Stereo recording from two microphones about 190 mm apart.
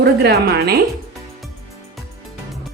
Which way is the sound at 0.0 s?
55° right (ahead or behind).